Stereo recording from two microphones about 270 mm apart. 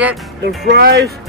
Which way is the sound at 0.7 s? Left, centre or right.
Right.